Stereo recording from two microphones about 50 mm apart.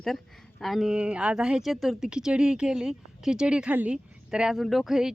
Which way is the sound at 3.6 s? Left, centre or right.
Right.